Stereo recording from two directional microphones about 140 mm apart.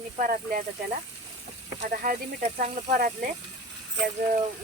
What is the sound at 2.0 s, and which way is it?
Speech, 70° right (ahead or behind).